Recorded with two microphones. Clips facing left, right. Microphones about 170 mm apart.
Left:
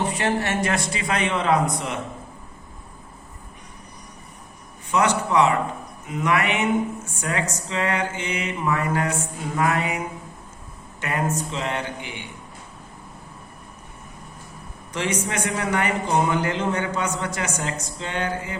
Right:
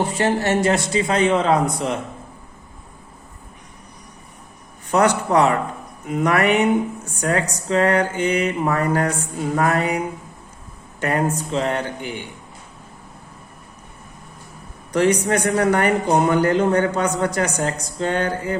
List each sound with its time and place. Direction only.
0.2 s a man's voice: 30° right (ahead or behind)
4.9 s a man's voice: 40° right (ahead or behind)
11.0 s a man's voice: 40° right (ahead or behind)
14.9 s a man's voice: 40° right (ahead or behind)